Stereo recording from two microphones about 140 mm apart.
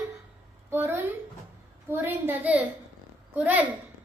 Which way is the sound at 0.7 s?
15° right (ahead or behind).